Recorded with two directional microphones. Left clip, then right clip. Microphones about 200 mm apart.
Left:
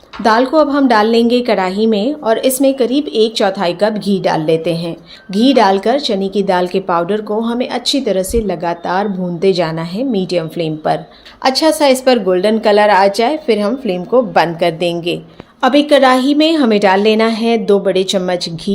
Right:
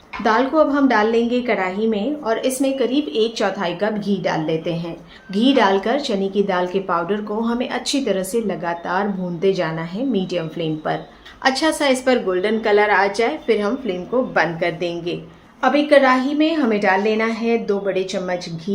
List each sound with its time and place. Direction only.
0.2 s a woman's voice: 35° left (ahead or behind)
15.6 s a woman's voice: 50° left (ahead or behind)